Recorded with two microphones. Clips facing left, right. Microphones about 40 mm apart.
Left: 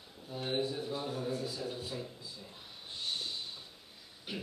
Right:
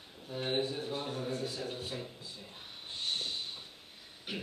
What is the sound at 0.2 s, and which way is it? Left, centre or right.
Speech, right.